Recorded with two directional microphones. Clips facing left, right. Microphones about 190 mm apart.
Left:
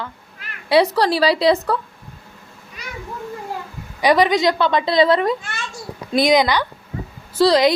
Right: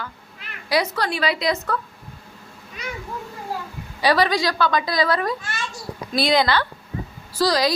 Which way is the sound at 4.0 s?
20° left (ahead or behind).